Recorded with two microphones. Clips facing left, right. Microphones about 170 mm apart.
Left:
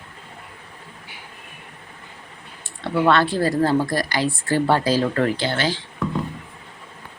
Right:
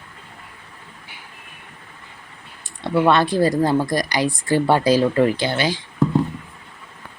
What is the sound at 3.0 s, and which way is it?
Speech, 15° right (ahead or behind).